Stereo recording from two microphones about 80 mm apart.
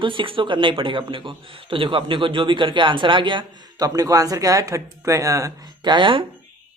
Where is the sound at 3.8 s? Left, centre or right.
Right.